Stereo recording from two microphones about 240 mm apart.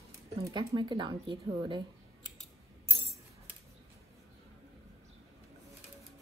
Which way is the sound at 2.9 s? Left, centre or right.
Right.